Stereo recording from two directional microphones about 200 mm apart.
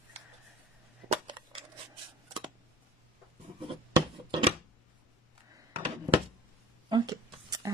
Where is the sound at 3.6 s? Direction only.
25° right (ahead or behind).